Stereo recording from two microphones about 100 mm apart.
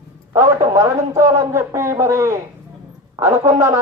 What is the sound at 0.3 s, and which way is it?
A man's voice, 30° right (ahead or behind).